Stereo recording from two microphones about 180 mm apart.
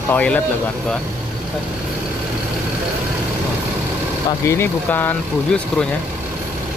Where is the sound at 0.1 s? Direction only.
5° left (ahead or behind).